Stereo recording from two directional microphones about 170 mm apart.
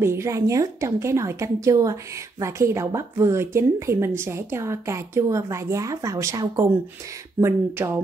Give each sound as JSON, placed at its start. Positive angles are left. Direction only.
{"t": 0.0, "sound": "a woman's voice", "side_deg": -15}